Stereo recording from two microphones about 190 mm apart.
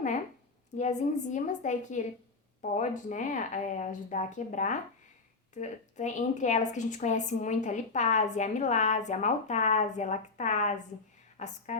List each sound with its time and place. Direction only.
0.8 s a woman's voice: 40° left (ahead or behind)